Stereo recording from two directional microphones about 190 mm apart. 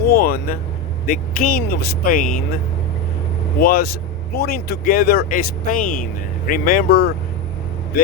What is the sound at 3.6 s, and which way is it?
Speech, 50° left (ahead or behind).